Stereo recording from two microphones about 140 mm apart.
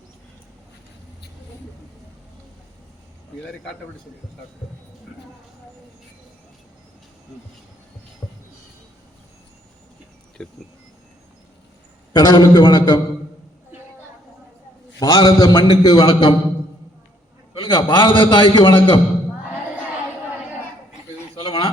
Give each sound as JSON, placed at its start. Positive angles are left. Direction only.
{"t": 8.2, "sound": "a sound", "side_deg": 20}
{"t": 10.4, "sound": "speech", "side_deg": 5}
{"t": 12.1, "sound": "a man's voice", "side_deg": 30}
{"t": 14.9, "sound": "a man's voice", "side_deg": 25}
{"t": 17.5, "sound": "a man's voice", "side_deg": 35}
{"t": 21.4, "sound": "a sound", "side_deg": 40}